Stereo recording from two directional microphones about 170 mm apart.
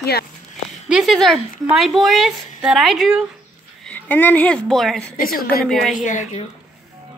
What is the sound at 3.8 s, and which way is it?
A woman's voice, 10° left (ahead or behind).